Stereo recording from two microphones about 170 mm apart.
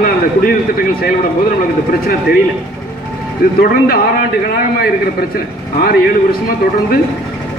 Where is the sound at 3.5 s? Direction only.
60° left (ahead or behind).